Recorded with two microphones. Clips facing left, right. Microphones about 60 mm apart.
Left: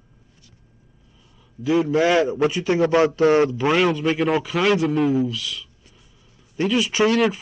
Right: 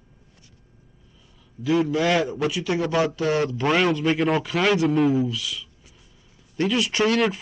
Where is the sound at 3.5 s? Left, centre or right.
Centre.